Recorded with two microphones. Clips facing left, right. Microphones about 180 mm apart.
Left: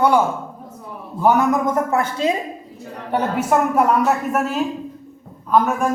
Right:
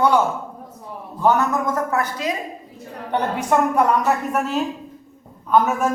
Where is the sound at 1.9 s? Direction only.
25° left (ahead or behind).